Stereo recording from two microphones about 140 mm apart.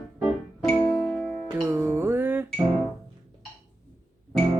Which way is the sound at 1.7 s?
15° right (ahead or behind).